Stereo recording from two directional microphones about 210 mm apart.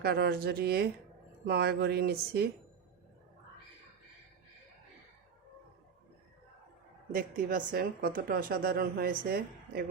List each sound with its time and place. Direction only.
0.0 s a woman's voice: 50° right (ahead or behind)
7.1 s a woman's voice: 40° right (ahead or behind)